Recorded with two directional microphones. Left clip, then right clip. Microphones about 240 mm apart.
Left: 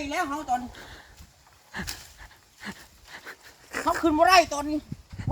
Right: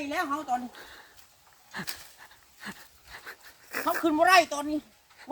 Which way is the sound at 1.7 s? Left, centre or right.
Centre.